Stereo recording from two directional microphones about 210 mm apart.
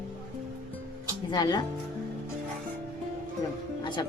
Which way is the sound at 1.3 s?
20° left (ahead or behind).